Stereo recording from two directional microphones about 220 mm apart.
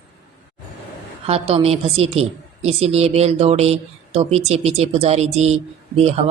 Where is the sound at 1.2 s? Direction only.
25° right (ahead or behind).